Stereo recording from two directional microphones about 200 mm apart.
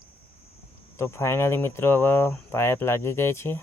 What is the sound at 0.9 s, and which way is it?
Speech, 15° left (ahead or behind).